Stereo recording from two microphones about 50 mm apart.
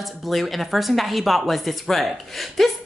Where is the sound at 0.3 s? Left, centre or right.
Centre.